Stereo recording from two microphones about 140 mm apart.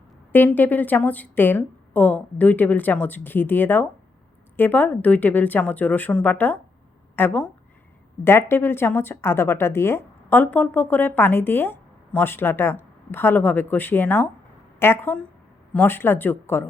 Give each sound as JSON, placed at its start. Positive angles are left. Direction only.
{"t": 0.3, "sound": "a woman's voice", "side_deg": 15}